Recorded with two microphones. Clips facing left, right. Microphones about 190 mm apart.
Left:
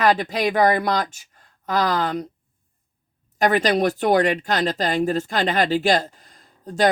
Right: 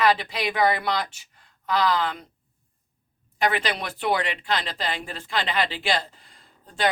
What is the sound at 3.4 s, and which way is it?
Speech, 45° left (ahead or behind).